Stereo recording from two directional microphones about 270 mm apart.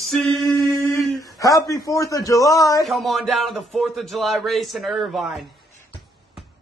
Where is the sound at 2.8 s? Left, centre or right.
Centre.